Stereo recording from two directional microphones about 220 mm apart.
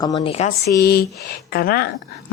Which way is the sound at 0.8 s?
45° left (ahead or behind).